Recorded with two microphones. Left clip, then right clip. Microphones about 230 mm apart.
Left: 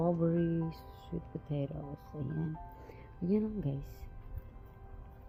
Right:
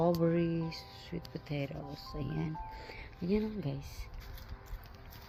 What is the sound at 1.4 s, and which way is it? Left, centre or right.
Speech, centre.